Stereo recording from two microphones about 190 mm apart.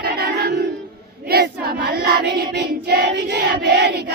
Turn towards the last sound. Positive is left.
turn(degrees=-60)  # may be behind; listen again after turning